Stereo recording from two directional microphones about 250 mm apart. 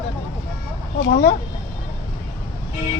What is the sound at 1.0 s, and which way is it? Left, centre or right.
Speech, left.